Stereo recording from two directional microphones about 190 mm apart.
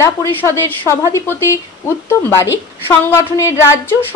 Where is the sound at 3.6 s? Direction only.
10° left (ahead or behind).